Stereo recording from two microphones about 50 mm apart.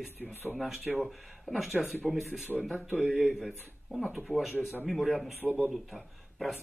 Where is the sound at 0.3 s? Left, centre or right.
Right.